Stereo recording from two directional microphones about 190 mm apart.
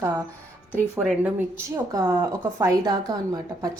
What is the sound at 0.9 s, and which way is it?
A woman's voice, 10° right (ahead or behind).